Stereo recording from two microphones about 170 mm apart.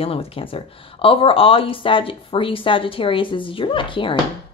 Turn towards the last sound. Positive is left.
turn(degrees=30)  # may be behind; listen again after turning